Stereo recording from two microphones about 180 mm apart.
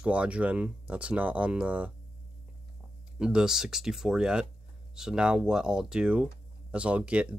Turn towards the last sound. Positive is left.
turn(degrees=-5)  # may be behind; listen again after turning